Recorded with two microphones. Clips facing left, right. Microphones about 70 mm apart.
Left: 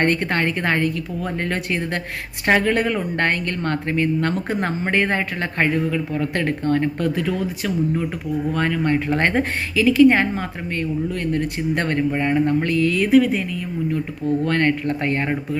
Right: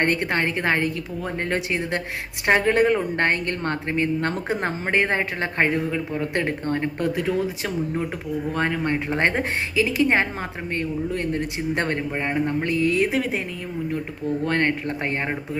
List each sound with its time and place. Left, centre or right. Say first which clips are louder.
0.0 s speech: left 2 dB; centre
14.4 s speech: left 2 dB; right